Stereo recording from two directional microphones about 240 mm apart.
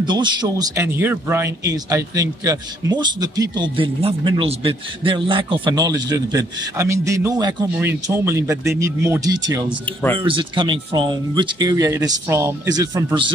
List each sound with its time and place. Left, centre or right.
0.0 s speech: centre